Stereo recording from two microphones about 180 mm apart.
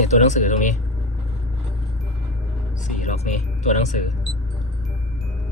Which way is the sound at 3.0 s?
40° left (ahead or behind).